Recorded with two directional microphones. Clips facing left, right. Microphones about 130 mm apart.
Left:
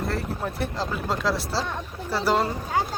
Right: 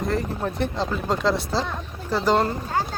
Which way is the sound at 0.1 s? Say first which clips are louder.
Right 3 dB; centre (ahead or behind).